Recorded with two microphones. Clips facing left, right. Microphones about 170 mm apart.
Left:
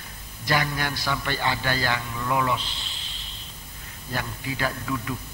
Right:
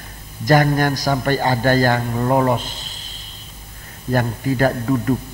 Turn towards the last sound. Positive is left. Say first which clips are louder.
# right 11 dB
turn(degrees=-45)  # may be behind; listen again after turning